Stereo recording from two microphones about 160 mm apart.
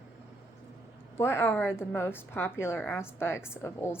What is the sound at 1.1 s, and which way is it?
A woman's voice, 15° left (ahead or behind).